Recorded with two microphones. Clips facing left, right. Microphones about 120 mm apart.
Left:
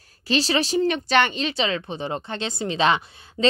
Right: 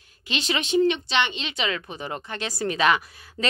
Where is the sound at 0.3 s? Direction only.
35° left (ahead or behind).